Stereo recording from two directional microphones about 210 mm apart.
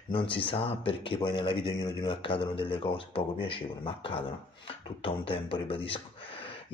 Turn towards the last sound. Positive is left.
turn(degrees=25)  # may be behind; listen again after turning